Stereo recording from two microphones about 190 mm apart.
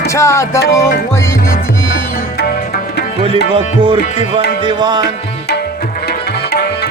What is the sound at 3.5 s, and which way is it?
Music, 30° right (ahead or behind).